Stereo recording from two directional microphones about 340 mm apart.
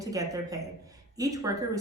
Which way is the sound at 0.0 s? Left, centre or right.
Centre.